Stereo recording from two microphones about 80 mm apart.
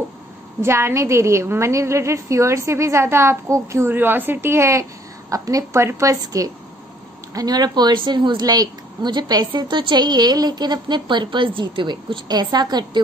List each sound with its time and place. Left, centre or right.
0.6 s a woman's voice: right
3.8 s a woman's voice: right
7.3 s a woman's voice: right
9.5 s a woman's voice: right